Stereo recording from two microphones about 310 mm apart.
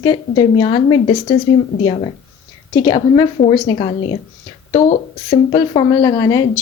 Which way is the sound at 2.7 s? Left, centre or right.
Centre.